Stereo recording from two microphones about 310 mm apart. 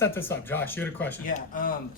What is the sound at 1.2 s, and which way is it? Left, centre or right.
Speech, left.